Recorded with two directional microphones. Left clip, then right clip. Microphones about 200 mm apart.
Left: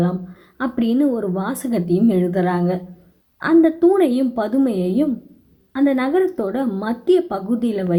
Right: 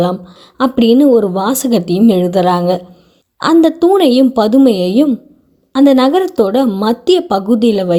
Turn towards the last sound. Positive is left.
turn(degrees=-50)  # may be behind; listen again after turning